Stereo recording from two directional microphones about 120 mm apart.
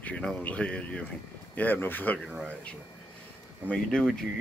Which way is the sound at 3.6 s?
10° left (ahead or behind).